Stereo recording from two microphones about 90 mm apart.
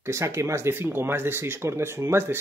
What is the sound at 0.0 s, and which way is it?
Speech, 30° right (ahead or behind).